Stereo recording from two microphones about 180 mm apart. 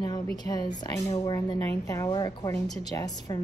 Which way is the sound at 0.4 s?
20° left (ahead or behind).